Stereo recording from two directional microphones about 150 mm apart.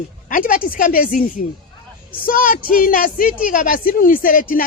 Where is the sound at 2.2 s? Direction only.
70° left (ahead or behind).